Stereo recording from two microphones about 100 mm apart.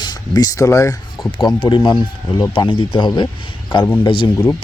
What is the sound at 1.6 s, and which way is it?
A man's voice, 50° left (ahead or behind).